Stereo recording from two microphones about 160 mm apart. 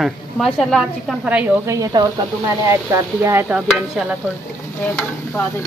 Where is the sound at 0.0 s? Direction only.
Centre (ahead or behind).